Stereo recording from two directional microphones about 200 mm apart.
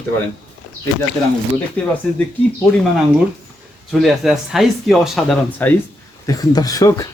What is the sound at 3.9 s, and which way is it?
Speech, centre (ahead or behind).